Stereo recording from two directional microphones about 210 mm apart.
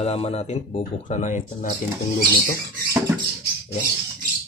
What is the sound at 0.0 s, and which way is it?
Speech, 30° left (ahead or behind).